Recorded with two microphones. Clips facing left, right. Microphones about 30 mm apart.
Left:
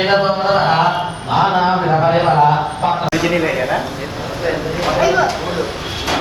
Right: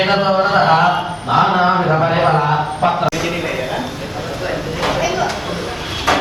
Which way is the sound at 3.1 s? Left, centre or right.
Left.